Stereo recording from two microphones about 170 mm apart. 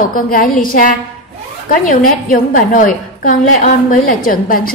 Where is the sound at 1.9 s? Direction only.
55° left (ahead or behind).